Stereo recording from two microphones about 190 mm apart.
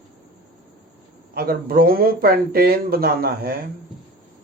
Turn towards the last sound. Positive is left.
turn(degrees=-55)  # may be behind; listen again after turning